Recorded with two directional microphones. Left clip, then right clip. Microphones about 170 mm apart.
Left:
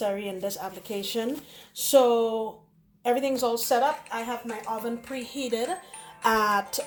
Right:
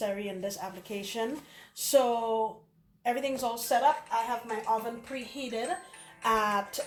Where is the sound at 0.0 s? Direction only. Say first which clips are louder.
Left 4 dB; 70° left (ahead or behind).